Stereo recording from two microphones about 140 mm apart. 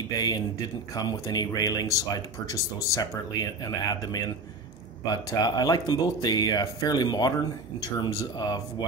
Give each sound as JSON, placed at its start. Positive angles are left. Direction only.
{"t": 0.2, "sound": "speech", "side_deg": 30}